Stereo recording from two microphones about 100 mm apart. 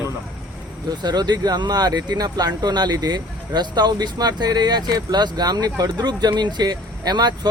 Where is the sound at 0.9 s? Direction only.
45° right (ahead or behind).